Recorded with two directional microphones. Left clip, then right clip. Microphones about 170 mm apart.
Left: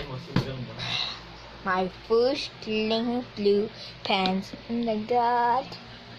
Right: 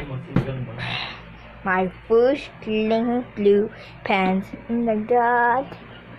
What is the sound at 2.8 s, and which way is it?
Speech, 20° right (ahead or behind).